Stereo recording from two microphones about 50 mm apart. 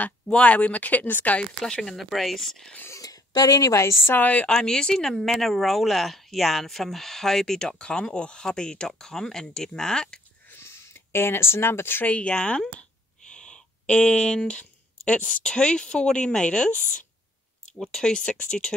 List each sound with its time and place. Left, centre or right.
0.3 s speech: left
1.6 s speech: centre
3.6 s a woman's voice: left
4.5 s speech: centre
10.6 s a sound: left
12.0 s speech: left
13.3 s a sound: centre
15.4 s speech: centre
17.9 s speech: centre